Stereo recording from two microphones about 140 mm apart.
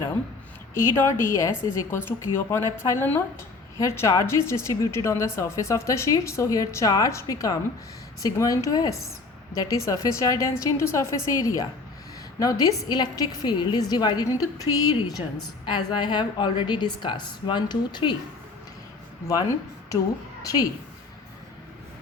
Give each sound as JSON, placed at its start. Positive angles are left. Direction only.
{"t": 0.7, "sound": "a woman's voice", "side_deg": 20}
{"t": 19.3, "sound": "a woman's voice", "side_deg": 25}